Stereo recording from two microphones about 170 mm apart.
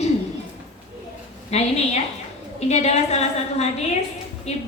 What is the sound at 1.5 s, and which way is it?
A woman's voice, 40° left (ahead or behind).